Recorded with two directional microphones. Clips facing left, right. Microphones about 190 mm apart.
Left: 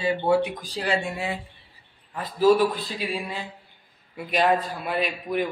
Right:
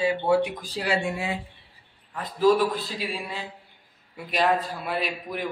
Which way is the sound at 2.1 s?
5° left (ahead or behind).